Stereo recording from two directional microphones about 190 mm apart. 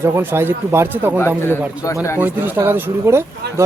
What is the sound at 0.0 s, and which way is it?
Speech, 10° right (ahead or behind).